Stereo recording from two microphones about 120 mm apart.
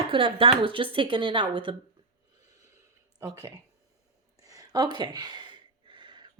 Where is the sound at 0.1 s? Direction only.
45° right (ahead or behind).